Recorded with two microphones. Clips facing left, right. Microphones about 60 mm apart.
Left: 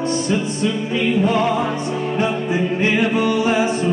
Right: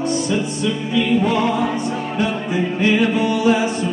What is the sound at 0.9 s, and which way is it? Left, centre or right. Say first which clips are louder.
Music: right 1 dB; left.